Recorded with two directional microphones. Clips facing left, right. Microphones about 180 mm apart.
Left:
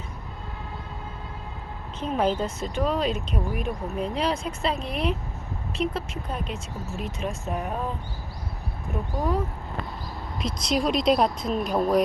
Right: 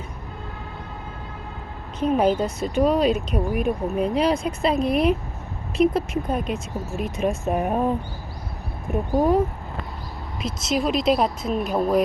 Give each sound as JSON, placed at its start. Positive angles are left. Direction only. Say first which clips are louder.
{"t": 2.0, "sound": "speech", "louder": "right 5 dB", "side_deg": -15}
{"t": 7.7, "sound": "speech", "louder": "right 8 dB", "side_deg": -55}
{"t": 10.4, "sound": "speech", "louder": "right 1 dB", "side_deg": -5}